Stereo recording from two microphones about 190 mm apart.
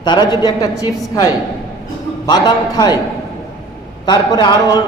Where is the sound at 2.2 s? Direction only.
20° left (ahead or behind).